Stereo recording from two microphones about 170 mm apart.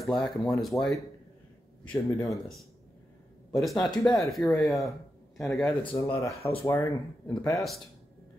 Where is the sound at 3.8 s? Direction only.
20° left (ahead or behind).